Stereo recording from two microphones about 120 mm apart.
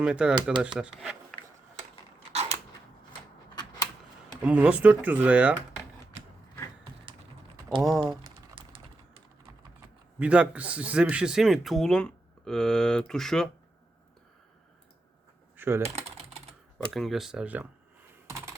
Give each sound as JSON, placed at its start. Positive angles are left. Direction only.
{"t": 0.0, "sound": "speech", "side_deg": -10}
{"t": 3.5, "sound": "a sound", "side_deg": 35}
{"t": 4.4, "sound": "speech", "side_deg": -10}
{"t": 7.8, "sound": "speech", "side_deg": 0}
{"t": 8.6, "sound": "typing", "side_deg": -50}
{"t": 10.2, "sound": "speech", "side_deg": -10}
{"t": 15.5, "sound": "typing", "side_deg": -20}
{"t": 15.8, "sound": "typing", "side_deg": -60}
{"t": 16.9, "sound": "speech", "side_deg": 0}
{"t": 18.1, "sound": "computer keyboard", "side_deg": -25}